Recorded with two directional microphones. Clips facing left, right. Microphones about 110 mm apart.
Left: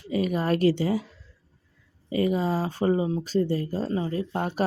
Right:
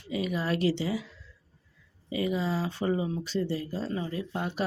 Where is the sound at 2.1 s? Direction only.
45° left (ahead or behind).